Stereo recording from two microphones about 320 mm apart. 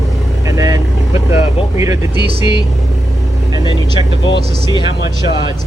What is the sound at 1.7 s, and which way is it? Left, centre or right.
Speech, centre.